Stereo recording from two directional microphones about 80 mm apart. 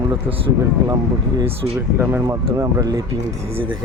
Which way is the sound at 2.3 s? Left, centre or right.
Right.